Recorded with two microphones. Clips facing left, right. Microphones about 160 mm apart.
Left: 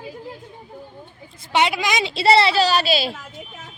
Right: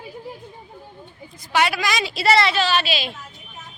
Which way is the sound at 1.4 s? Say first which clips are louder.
Left 1 dB; 20° left (ahead or behind).